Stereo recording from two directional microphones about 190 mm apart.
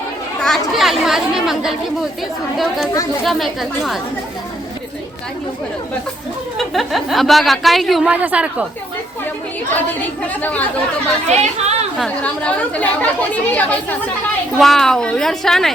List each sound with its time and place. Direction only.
0.4 s a woman's voice: centre (ahead or behind)
6.6 s a woman's voice: centre (ahead or behind)
10.4 s speech: 10° left (ahead or behind)
11.3 s speech: 35° right (ahead or behind)
11.9 s a woman's voice: 5° left (ahead or behind)